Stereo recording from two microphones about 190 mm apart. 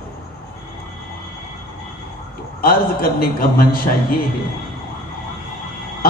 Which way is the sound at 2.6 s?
50° left (ahead or behind).